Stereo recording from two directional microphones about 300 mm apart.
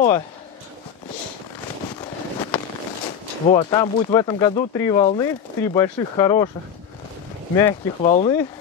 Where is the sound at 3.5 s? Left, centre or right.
Centre.